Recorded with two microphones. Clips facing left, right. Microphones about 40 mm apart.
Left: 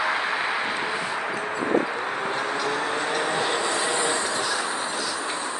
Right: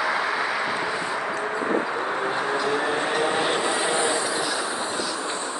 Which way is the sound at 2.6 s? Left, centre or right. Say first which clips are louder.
Right 2 dB; centre.